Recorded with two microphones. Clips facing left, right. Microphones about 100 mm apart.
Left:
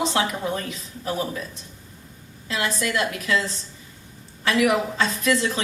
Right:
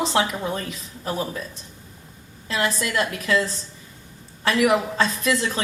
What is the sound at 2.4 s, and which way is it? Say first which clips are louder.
A woman's voice: right 1 dB; 40° right (ahead or behind).